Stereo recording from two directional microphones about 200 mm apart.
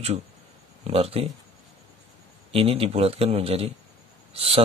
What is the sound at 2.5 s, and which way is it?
Speech, 30° right (ahead or behind).